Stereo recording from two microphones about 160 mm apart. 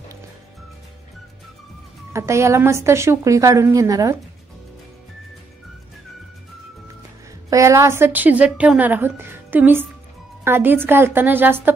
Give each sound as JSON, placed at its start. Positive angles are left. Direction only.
{"t": 2.1, "sound": "a woman's voice", "side_deg": -20}
{"t": 7.4, "sound": "a woman's voice", "side_deg": -20}